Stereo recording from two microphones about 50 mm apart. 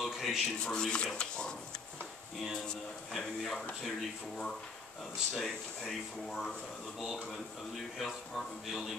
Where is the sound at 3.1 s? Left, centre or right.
Centre.